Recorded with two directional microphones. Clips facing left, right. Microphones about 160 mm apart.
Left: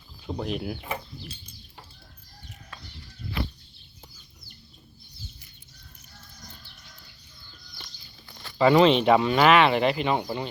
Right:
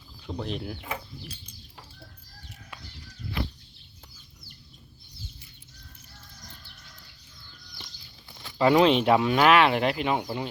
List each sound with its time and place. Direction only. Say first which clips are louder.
0.3 s speech: left 3 dB; 10° left (ahead or behind)
8.3 s a sound: even; 15° right (ahead or behind)
8.5 s speech: left 2 dB; centre (ahead or behind)